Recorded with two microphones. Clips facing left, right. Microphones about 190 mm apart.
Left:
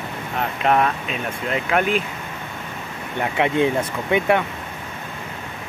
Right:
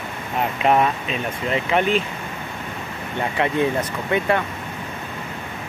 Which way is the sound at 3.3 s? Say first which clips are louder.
Left 2 dB; 15° left (ahead or behind).